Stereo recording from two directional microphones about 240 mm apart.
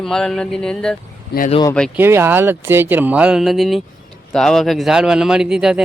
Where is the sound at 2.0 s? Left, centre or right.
Centre.